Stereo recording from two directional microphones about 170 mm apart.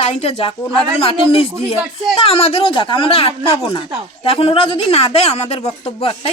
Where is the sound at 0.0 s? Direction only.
40° left (ahead or behind).